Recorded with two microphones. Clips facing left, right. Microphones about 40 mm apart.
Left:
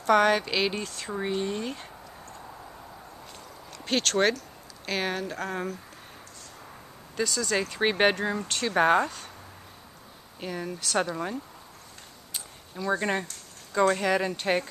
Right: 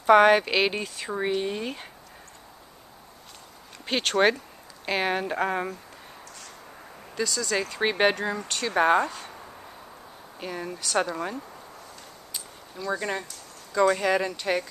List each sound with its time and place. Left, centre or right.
0.0 s speech: centre
3.8 s speech: centre
7.2 s speech: centre
10.4 s speech: centre
13.0 s speech: centre
13.8 s speech: centre